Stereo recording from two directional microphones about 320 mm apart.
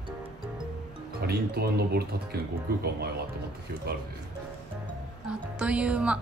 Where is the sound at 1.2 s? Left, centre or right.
Right.